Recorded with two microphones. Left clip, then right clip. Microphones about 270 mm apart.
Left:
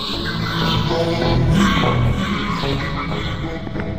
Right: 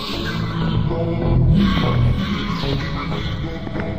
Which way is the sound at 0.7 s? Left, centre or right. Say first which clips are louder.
Left 5 dB; left.